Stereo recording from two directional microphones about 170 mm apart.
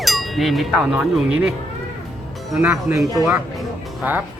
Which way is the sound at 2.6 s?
15° right (ahead or behind).